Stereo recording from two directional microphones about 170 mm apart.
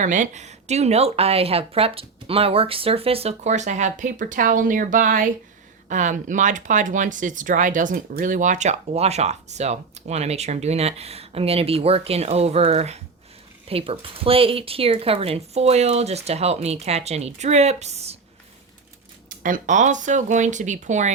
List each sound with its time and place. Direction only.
0.0 s speech: 45° right (ahead or behind)
19.4 s speech: 50° right (ahead or behind)